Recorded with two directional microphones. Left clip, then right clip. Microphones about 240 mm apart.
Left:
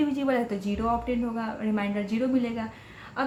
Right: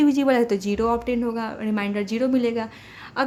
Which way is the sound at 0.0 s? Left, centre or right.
Right.